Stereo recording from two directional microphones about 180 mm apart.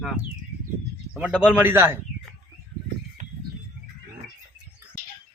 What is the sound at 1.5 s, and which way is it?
Speech, 10° right (ahead or behind).